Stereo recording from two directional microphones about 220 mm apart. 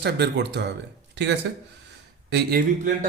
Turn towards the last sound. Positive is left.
turn(degrees=-40)  # may be behind; listen again after turning